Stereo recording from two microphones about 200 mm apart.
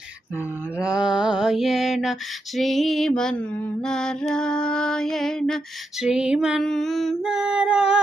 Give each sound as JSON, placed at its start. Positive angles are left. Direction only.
{"t": 0.8, "sound": "mantra", "side_deg": -5}